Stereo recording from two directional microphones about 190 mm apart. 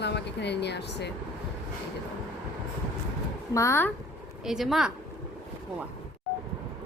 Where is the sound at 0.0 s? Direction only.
65° left (ahead or behind).